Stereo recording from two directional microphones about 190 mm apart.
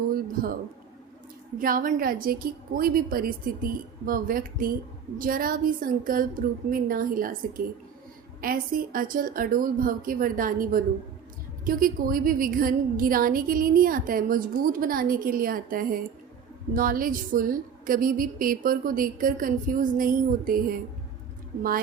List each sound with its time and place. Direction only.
1.5 s a woman's voice: 45° right (ahead or behind)